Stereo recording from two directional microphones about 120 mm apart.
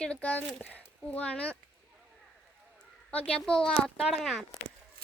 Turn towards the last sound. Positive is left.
turn(degrees=0)  # may be behind; listen again after turning